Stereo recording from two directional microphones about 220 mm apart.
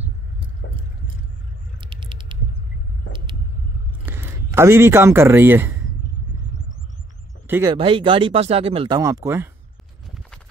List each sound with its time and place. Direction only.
1.8 s mechanisms: 20° right (ahead or behind)
4.0 s speech: 10° right (ahead or behind)
7.4 s speech: 10° right (ahead or behind)
7.7 s speech: 25° right (ahead or behind)